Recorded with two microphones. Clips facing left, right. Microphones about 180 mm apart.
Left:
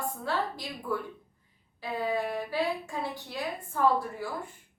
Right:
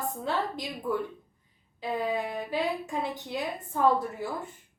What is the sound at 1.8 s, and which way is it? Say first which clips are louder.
A woman's voice: right 1 dB; 20° right (ahead or behind).